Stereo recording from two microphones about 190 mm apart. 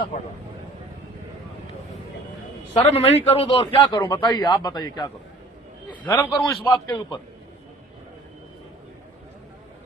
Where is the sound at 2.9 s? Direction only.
30° left (ahead or behind).